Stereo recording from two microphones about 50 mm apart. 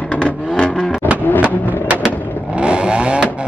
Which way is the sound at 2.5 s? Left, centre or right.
Right.